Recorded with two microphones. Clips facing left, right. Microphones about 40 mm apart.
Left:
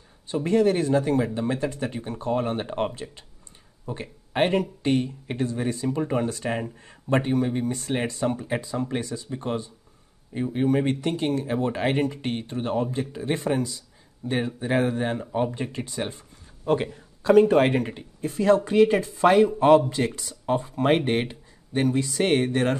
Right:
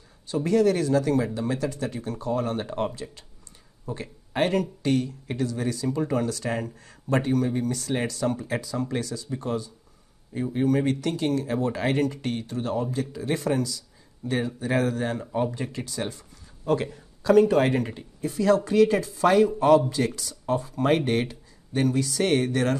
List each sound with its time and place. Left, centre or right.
0.3 s speech: left